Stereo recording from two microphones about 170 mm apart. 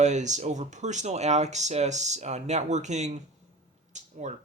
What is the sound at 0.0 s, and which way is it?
Speech, 45° right (ahead or behind).